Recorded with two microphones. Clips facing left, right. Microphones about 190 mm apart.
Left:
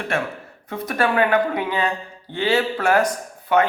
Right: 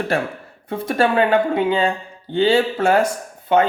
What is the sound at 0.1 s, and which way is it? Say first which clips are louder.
Speech: right 3 dB; 35° right (ahead or behind).